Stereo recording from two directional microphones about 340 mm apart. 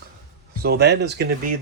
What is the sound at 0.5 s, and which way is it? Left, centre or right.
Speech, right.